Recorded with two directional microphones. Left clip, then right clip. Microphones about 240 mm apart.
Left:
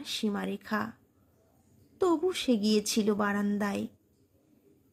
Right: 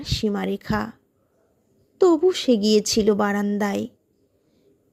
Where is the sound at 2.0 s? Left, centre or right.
Right.